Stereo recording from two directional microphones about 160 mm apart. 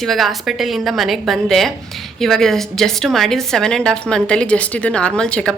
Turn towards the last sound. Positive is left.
turn(degrees=5)  # may be behind; listen again after turning